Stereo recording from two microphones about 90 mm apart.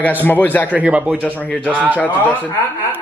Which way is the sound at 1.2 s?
15° left (ahead or behind).